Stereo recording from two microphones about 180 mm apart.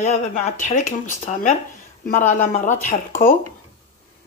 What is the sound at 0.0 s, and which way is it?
Speech, 40° left (ahead or behind).